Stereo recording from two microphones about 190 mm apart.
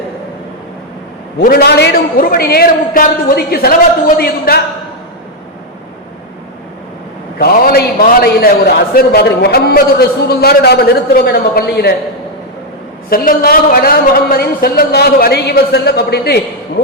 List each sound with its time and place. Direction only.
1.4 s a man's voice: 50° left (ahead or behind)
7.3 s a man's voice: 50° left (ahead or behind)
13.1 s a man's voice: 50° left (ahead or behind)